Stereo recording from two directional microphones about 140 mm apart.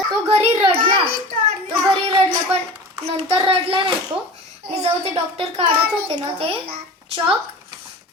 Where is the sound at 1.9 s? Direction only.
45° right (ahead or behind).